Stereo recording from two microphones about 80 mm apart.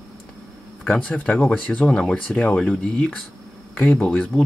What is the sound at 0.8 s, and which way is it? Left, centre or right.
Speech, centre.